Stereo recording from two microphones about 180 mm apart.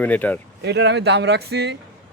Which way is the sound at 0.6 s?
70° right (ahead or behind).